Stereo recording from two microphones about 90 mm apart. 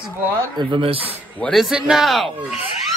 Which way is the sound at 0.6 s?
70° right (ahead or behind).